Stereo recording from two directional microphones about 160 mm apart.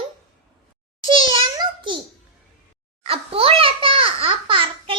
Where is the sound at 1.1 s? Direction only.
30° right (ahead or behind).